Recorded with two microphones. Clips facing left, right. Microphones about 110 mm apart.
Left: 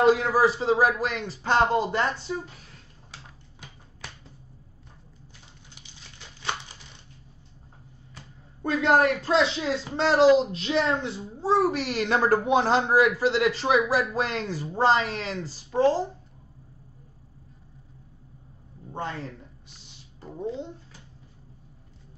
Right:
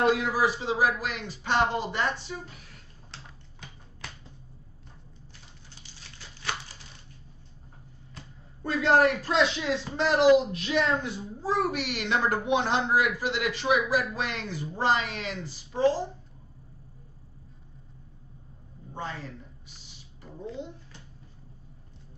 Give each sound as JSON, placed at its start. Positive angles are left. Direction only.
{"t": 0.1, "sound": "a child's voice", "side_deg": 35}
{"t": 5.8, "sound": "typewriter", "side_deg": 20}
{"t": 8.6, "sound": "a man's voice", "side_deg": 25}
{"t": 15.7, "sound": "speech", "side_deg": 50}
{"t": 20.2, "sound": "a sound", "side_deg": 35}
{"t": 20.4, "sound": "a man's voice", "side_deg": 30}